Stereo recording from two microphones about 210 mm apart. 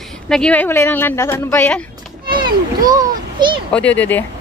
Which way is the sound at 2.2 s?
20° right (ahead or behind).